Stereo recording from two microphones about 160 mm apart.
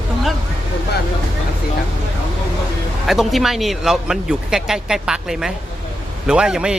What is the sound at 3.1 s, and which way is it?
A man's voice, centre (ahead or behind).